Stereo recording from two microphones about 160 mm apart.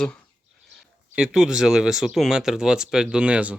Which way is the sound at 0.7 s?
5° right (ahead or behind).